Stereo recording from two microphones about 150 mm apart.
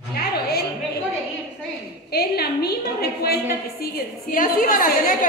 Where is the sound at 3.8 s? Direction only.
75° left (ahead or behind).